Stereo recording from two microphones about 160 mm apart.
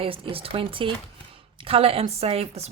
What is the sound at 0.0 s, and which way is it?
A woman's voice, 35° right (ahead or behind).